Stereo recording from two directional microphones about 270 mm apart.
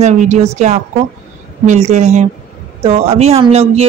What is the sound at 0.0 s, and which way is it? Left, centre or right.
Speech, right.